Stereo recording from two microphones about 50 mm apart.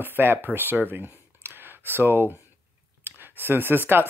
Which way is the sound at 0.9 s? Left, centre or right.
Right.